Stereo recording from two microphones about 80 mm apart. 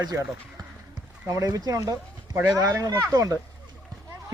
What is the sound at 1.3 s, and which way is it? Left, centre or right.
Speech, right.